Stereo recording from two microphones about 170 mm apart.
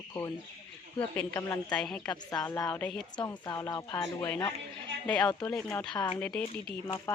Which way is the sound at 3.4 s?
20° left (ahead or behind).